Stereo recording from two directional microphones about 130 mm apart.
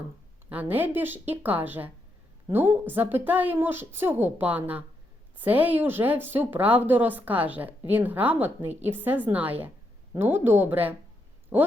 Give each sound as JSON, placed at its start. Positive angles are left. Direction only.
{"t": 0.5, "sound": "speech", "side_deg": -15}